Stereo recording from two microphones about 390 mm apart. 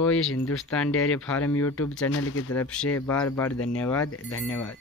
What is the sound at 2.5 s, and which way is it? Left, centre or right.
Speech, centre.